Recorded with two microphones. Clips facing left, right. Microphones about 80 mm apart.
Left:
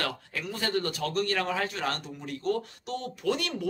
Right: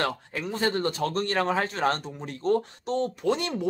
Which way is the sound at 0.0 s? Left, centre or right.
Right.